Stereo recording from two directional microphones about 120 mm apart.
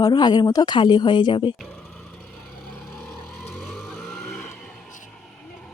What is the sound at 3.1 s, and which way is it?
Vehicle, 5° left (ahead or behind).